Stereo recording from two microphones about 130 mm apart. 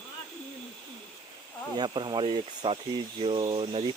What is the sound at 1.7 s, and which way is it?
Speech, 35° right (ahead or behind).